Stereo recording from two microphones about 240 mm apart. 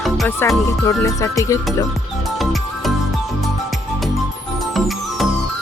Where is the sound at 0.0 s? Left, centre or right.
Centre.